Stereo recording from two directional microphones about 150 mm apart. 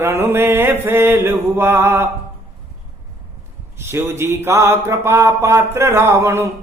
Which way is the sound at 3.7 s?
15° right (ahead or behind).